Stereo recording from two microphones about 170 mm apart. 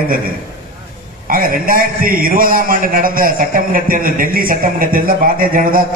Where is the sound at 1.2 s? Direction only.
55° right (ahead or behind).